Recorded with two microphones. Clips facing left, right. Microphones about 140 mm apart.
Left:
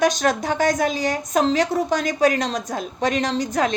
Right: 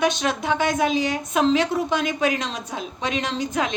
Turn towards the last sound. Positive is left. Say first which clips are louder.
# left 3 dB
turn(degrees=40)  # may be behind; listen again after turning